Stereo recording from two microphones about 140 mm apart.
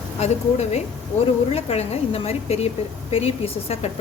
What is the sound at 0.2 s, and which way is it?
A woman's voice, 50° left (ahead or behind).